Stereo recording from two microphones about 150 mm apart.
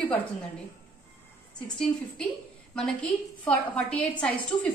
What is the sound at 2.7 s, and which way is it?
A woman's voice, 5° left (ahead or behind).